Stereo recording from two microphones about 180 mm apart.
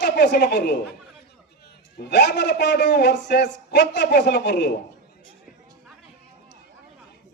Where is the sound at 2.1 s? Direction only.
70° left (ahead or behind).